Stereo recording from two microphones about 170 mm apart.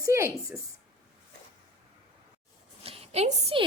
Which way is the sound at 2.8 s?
35° right (ahead or behind).